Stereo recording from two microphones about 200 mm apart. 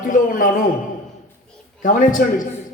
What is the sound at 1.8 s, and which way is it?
Speech, 40° left (ahead or behind).